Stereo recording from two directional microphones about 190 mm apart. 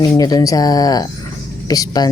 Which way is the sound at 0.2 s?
20° left (ahead or behind).